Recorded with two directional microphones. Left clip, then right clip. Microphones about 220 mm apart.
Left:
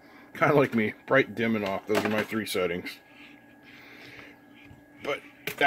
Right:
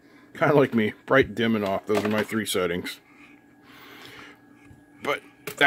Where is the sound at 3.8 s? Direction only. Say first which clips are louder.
Right 3 dB; 30° right (ahead or behind).